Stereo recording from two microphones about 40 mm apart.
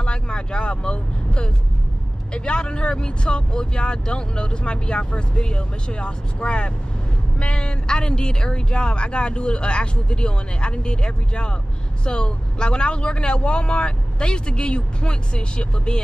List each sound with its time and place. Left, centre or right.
0.0 s vehicle: left
2.3 s speech: left